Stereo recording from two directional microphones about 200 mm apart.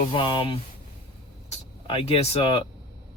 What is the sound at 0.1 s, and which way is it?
Speech, 25° left (ahead or behind).